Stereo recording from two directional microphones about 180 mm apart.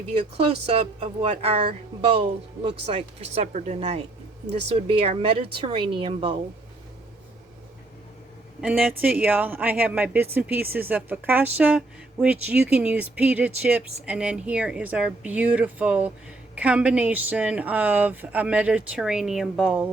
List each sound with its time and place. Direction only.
0.3 s a woman's voice: 30° right (ahead or behind)
8.6 s speech: 5° right (ahead or behind)